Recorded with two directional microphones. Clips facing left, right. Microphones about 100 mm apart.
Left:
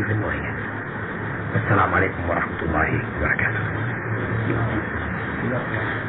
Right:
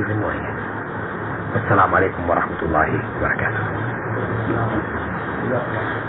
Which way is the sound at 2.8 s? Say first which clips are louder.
Right 3 dB; 40° right (ahead or behind).